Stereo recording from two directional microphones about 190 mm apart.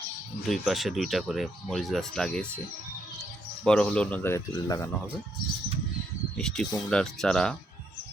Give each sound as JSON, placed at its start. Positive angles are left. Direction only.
{"t": 0.4, "sound": "speech", "side_deg": 0}
{"t": 3.6, "sound": "speech", "side_deg": 5}
{"t": 6.3, "sound": "speech", "side_deg": 5}